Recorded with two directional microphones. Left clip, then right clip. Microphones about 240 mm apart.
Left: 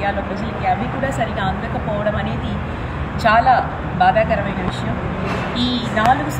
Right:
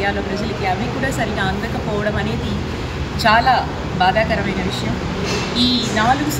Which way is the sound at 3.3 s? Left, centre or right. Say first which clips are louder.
Left 1 dB; centre.